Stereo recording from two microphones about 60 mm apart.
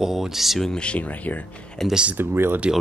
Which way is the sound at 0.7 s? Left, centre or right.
Left.